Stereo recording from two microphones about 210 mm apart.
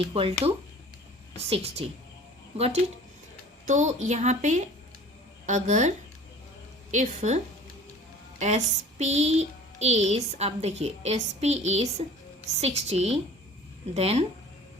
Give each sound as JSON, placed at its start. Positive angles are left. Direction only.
{"t": 0.1, "sound": "a woman's voice", "side_deg": -25}
{"t": 3.7, "sound": "speech", "side_deg": -35}
{"t": 6.9, "sound": "a woman's voice", "side_deg": -35}